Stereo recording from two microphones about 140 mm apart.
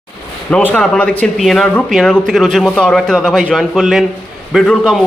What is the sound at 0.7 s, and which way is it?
A man's voice, 10° left (ahead or behind).